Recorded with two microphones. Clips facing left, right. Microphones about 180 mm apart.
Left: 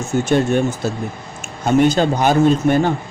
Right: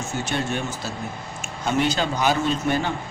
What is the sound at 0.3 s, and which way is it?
Speech, 50° left (ahead or behind).